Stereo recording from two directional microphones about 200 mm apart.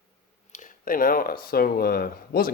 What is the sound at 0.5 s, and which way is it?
Speech, 40° left (ahead or behind).